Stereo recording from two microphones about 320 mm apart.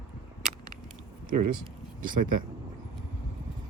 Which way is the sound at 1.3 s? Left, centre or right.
Right.